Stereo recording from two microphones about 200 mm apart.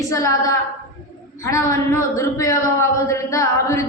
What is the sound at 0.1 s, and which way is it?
A woman's voice, 15° left (ahead or behind).